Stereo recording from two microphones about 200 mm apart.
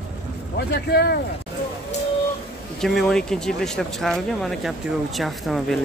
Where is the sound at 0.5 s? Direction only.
55° left (ahead or behind).